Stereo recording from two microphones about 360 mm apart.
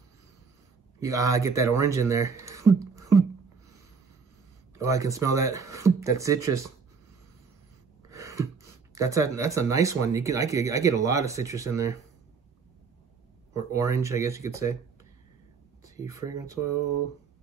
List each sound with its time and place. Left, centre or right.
0.9 s speech: centre
4.7 s speech: centre
8.1 s a sound: centre
8.9 s speech: centre
13.5 s speech: centre
15.8 s speech: centre